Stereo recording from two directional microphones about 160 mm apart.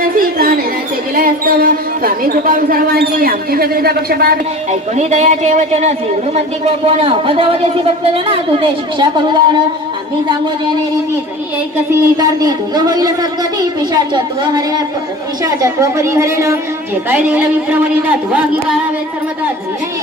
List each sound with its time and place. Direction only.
0.0 s a sound: 65° right (ahead or behind)
1.1 s speech: 65° right (ahead or behind)
4.7 s a man's voice: 45° right (ahead or behind); by 9.4 s 30° right (ahead or behind)
11.9 s speech: 25° right (ahead or behind)